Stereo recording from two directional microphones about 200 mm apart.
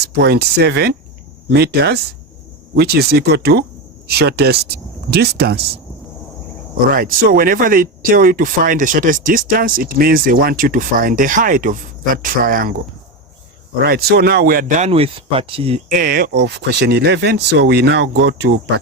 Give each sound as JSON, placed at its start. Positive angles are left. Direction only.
{"t": 0.0, "sound": "speech", "side_deg": -55}
{"t": 6.9, "sound": "speech", "side_deg": -45}
{"t": 13.8, "sound": "speech", "side_deg": -50}
{"t": 15.9, "sound": "speech", "side_deg": -45}